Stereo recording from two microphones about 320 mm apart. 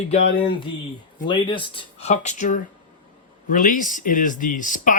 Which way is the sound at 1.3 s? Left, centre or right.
Centre.